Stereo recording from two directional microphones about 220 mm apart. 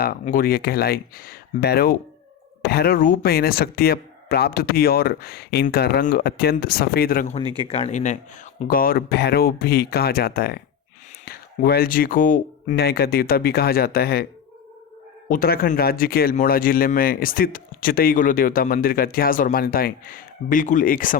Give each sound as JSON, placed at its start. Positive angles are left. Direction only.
{"t": 0.0, "sound": "speech", "side_deg": 40}
{"t": 7.5, "sound": "speech", "side_deg": 25}
{"t": 15.3, "sound": "speech", "side_deg": 40}